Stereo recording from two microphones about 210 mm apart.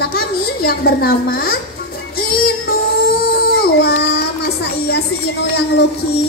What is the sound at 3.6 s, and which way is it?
Child singing, 50° left (ahead or behind).